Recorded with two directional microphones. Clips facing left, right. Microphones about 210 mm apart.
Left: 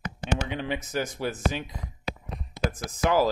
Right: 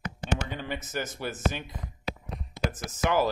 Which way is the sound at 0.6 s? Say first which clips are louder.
Left 4 dB; 15° left (ahead or behind).